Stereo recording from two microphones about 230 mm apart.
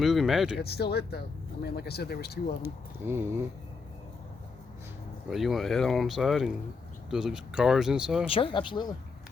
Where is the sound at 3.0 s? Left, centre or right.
Centre.